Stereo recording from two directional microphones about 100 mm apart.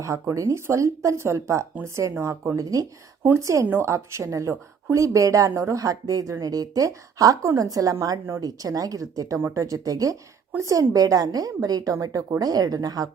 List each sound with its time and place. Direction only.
0.0 s a woman's voice: 30° right (ahead or behind)